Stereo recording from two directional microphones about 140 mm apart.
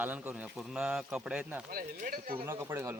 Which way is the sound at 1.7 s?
85° right.